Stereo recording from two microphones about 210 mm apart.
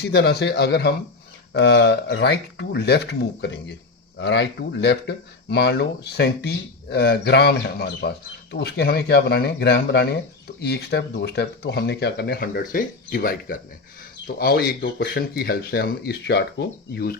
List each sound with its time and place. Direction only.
0.0 s speech: 50° left (ahead or behind)